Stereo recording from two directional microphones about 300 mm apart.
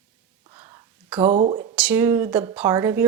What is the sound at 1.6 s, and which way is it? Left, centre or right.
Speech, centre.